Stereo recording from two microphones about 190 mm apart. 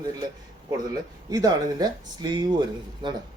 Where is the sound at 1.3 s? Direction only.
20° right (ahead or behind).